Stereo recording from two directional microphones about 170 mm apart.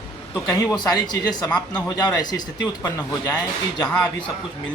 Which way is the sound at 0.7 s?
25° left (ahead or behind).